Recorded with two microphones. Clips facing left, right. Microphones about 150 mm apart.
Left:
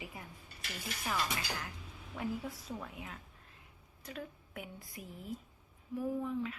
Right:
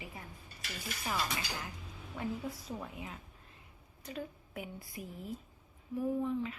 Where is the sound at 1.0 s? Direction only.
20° right (ahead or behind).